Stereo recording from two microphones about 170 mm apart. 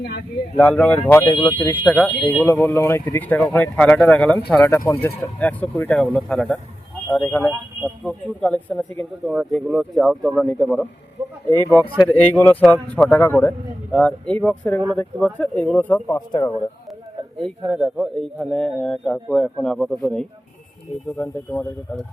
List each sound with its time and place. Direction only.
0.5 s speech: 5° left (ahead or behind)
1.2 s speech: 20° left (ahead or behind)
1.8 s a man's voice: 5° left (ahead or behind)
2.5 s speech: 15° left (ahead or behind)
9.2 s a man's voice: 5° right (ahead or behind)
11.5 s speech: 25° right (ahead or behind)
12.0 s speech: 10° left (ahead or behind)
16.1 s speech: 25° left (ahead or behind)
17.3 s a man's voice: centre (ahead or behind)